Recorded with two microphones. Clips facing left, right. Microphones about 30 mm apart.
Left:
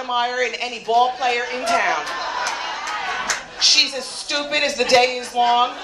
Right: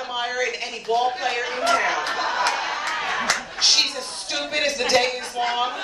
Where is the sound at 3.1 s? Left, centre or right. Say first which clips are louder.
Right 1 dB; right.